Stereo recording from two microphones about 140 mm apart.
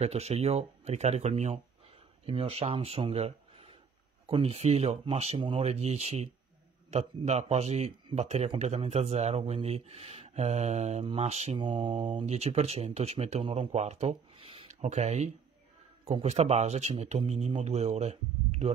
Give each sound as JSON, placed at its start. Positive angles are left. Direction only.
{"t": 0.0, "sound": "speech", "side_deg": -50}
{"t": 11.5, "sound": "speech", "side_deg": -40}
{"t": 14.8, "sound": "speech", "side_deg": -55}